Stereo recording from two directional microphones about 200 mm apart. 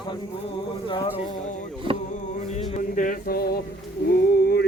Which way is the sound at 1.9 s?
25° right (ahead or behind).